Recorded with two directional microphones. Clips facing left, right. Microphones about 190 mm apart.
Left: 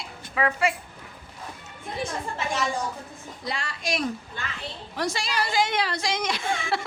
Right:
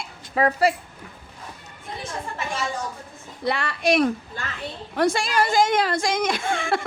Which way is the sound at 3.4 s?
60° right (ahead or behind).